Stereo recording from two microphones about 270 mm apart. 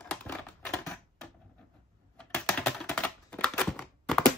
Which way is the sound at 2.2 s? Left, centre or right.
Centre.